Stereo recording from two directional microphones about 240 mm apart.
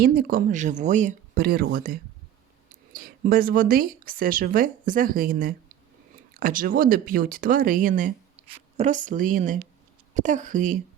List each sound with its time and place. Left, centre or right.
0.0 s speech: right